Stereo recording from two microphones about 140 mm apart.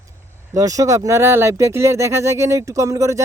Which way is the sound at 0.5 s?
25° right (ahead or behind).